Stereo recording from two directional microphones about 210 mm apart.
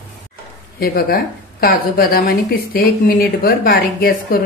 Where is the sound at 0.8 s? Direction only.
45° left (ahead or behind).